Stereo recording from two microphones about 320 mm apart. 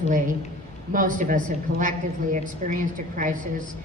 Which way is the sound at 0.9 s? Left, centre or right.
Right.